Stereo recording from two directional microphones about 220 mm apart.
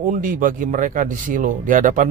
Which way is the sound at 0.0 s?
35° right (ahead or behind).